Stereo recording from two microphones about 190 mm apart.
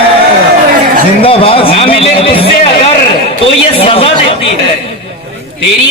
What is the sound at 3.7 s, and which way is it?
A man's voice, 30° left (ahead or behind).